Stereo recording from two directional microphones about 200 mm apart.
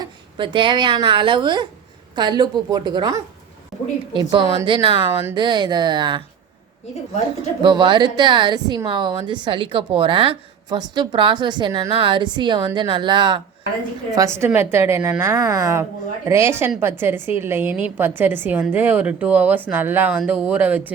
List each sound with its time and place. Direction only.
0.0 s a woman's voice: 25° right (ahead or behind)
7.6 s a woman's voice: 25° right (ahead or behind)